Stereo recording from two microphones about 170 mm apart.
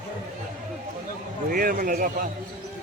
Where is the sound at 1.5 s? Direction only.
55° right (ahead or behind).